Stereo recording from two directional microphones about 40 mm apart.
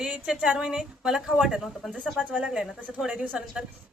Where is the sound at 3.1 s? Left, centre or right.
Right.